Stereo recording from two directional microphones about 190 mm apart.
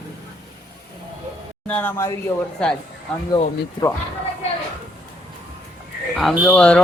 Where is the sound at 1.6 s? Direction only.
10° left (ahead or behind).